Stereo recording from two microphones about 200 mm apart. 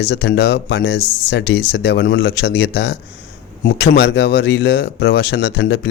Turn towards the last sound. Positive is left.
turn(degrees=55)  # may be behind; listen again after turning